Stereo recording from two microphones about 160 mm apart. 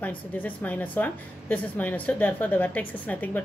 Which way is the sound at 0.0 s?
10° left (ahead or behind).